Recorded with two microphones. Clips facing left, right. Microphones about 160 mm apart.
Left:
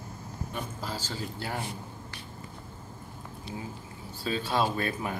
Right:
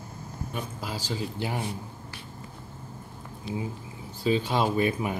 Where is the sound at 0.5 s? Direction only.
10° right (ahead or behind).